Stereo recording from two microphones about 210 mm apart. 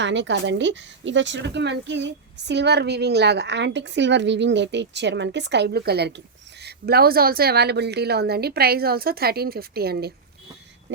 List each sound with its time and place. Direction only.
0.0 s speech: 60° right (ahead or behind)